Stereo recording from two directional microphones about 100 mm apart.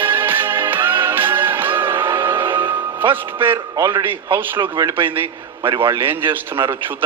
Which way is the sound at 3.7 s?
35° right (ahead or behind).